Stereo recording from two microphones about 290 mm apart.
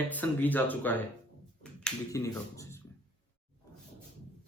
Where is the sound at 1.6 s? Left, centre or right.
Centre.